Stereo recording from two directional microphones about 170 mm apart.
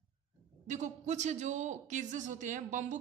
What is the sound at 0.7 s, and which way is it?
A woman's voice, 45° right (ahead or behind).